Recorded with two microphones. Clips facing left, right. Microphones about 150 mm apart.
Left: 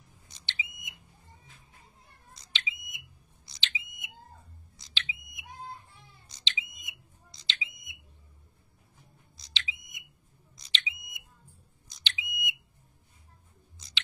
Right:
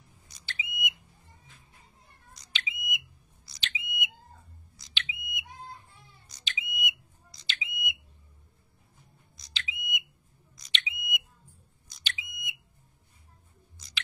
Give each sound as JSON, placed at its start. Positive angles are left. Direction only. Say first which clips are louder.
{"t": 0.5, "sound": "smoke detector", "louder": "right 5 dB", "side_deg": 35}
{"t": 2.3, "sound": "smoke detector", "louder": "right 1 dB", "side_deg": 25}
{"t": 9.4, "sound": "smoke detector", "louder": "right 1 dB", "side_deg": 30}
{"t": 12.0, "sound": "smoke detector", "louder": "left 3 dB", "side_deg": 20}
{"t": 13.7, "sound": "chewing", "louder": "right 1 dB", "side_deg": 25}